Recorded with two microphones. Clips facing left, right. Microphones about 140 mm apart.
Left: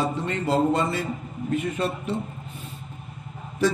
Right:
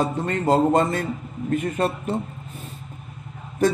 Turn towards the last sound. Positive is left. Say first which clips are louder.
# right 3 dB
turn(degrees=-50)  # may be behind; listen again after turning